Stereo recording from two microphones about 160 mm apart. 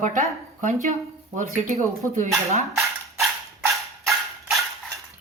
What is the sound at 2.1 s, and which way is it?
Speech, 40° right (ahead or behind).